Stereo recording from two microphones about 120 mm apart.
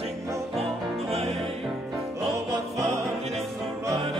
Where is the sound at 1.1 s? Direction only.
60° right (ahead or behind).